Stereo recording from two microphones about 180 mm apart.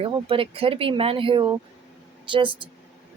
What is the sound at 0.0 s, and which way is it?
A woman's voice, 30° right (ahead or behind).